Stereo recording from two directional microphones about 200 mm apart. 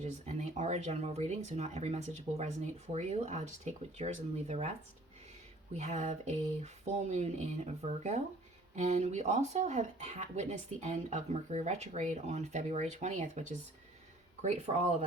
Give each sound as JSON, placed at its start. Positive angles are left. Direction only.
{"t": 0.0, "sound": "speech", "side_deg": -35}
{"t": 5.7, "sound": "speech", "side_deg": -35}